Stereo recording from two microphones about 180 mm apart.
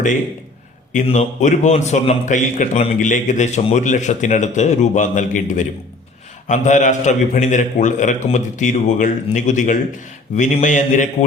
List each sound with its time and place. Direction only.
0.9 s a man's voice: 35° left (ahead or behind)